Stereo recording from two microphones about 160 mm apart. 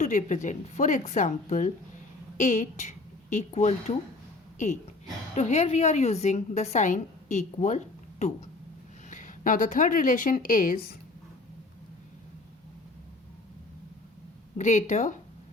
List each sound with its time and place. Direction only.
0.0 s a woman's voice: 50° left (ahead or behind)
9.0 s speech: 55° left (ahead or behind)
14.6 s a woman's voice: 50° left (ahead or behind)